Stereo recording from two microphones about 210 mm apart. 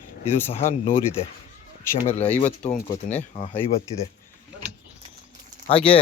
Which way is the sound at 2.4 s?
35° left (ahead or behind).